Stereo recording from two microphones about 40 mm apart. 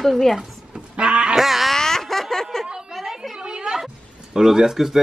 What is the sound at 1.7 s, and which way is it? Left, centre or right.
Snicker, centre.